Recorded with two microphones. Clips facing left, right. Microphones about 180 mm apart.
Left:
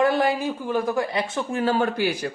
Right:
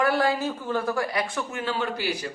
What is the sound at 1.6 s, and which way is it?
Speech, 45° left (ahead or behind).